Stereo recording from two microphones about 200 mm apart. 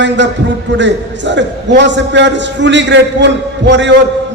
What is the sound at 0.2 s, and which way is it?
A man's voice, 60° right (ahead or behind).